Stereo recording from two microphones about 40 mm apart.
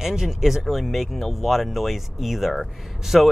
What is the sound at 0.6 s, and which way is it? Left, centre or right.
Speech, centre.